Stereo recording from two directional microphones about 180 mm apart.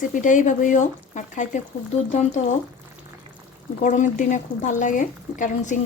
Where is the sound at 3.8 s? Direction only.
45° left (ahead or behind).